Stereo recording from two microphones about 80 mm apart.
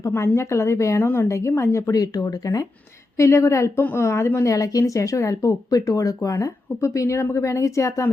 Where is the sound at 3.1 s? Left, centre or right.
Left.